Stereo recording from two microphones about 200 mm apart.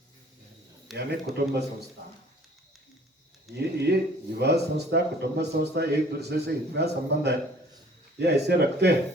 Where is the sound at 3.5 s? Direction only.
55° right (ahead or behind).